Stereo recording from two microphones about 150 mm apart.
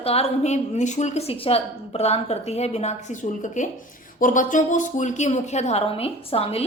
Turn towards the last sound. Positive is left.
turn(degrees=40)  # may be behind; listen again after turning